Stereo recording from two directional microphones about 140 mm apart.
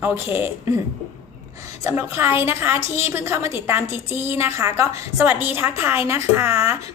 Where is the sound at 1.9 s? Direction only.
20° right (ahead or behind).